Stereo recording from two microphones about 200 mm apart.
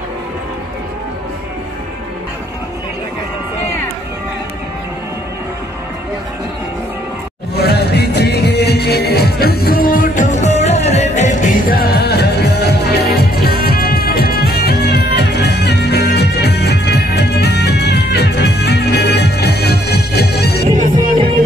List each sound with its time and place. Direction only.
7.5 s music: 55° left (ahead or behind)